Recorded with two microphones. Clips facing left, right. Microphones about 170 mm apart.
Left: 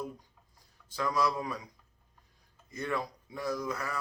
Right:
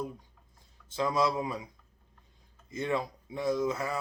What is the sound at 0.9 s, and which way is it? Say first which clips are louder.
Speech: right 2 dB; 25° right (ahead or behind).